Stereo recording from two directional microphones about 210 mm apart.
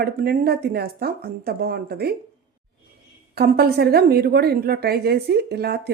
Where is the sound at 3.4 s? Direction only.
45° right (ahead or behind).